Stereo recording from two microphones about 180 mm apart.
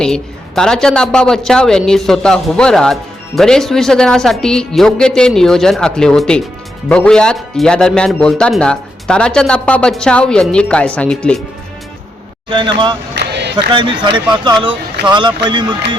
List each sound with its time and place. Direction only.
0.0 s a woman's voice: 5° left (ahead or behind)
12.5 s speech: 25° right (ahead or behind)
13.1 s a sound: 70° right (ahead or behind)
13.7 s speech: 25° right (ahead or behind)